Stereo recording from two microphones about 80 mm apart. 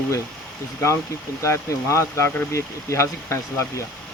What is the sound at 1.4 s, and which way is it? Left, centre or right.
Speech, left.